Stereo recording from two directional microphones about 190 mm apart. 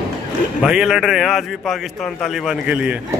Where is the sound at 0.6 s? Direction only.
5° right (ahead or behind).